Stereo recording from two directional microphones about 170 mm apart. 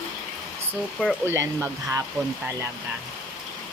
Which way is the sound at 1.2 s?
15° right (ahead or behind).